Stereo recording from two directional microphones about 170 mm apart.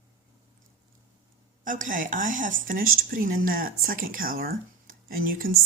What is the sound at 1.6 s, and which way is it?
A woman's voice, 50° right (ahead or behind).